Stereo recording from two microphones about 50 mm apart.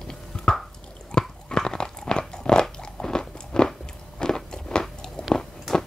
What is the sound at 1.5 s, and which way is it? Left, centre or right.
Crunch, centre.